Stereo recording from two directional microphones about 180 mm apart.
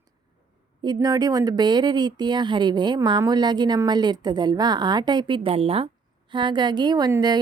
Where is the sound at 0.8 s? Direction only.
20° right (ahead or behind).